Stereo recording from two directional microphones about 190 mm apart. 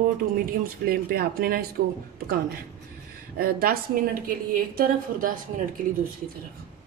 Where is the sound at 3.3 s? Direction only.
50° right (ahead or behind).